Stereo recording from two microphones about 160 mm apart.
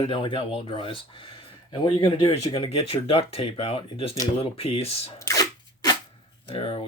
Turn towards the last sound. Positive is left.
turn(degrees=35)  # may be behind; listen again after turning